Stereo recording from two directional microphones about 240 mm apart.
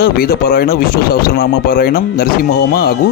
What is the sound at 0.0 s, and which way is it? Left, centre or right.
Speech, left.